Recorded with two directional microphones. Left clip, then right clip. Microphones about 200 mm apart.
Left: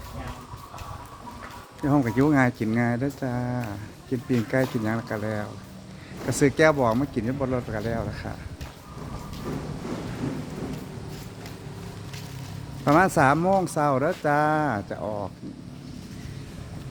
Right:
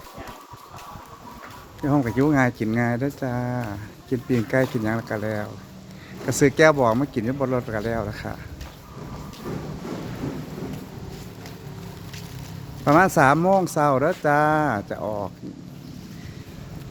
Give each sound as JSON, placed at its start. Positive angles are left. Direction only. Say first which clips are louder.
{"t": 1.8, "sound": "speech", "louder": "right 1 dB", "side_deg": -5}
{"t": 12.8, "sound": "speech", "louder": "right 3 dB", "side_deg": -15}